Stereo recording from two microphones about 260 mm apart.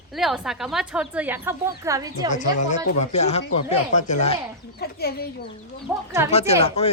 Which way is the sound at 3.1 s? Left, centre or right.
Left.